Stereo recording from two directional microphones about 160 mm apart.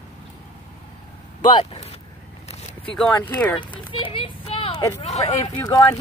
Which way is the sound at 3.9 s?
35° left (ahead or behind).